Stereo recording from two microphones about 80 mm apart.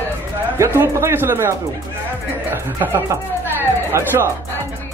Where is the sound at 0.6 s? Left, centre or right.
Right.